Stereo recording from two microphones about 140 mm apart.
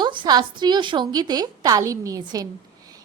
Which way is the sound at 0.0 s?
35° right (ahead or behind).